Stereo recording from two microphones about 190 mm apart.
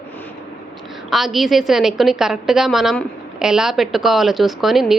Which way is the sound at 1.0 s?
Centre (ahead or behind).